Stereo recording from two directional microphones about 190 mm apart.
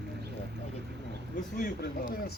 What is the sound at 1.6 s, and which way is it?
Speech, 50° left (ahead or behind).